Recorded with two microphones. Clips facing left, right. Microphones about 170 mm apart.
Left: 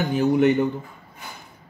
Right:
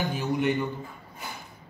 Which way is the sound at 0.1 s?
65° left (ahead or behind).